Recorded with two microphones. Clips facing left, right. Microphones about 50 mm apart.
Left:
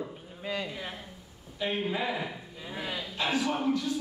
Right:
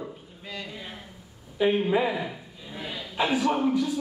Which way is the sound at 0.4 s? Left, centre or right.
Centre.